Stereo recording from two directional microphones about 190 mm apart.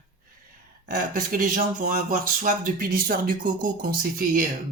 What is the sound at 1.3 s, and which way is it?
Speech, 45° right (ahead or behind).